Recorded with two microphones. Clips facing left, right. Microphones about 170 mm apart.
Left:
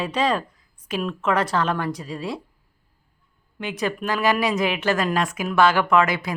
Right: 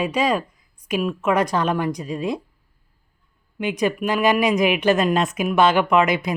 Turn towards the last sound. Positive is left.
turn(degrees=-20)  # may be behind; listen again after turning